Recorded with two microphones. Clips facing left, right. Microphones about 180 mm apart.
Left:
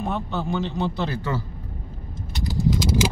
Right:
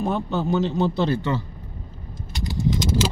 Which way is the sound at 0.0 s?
35° right (ahead or behind).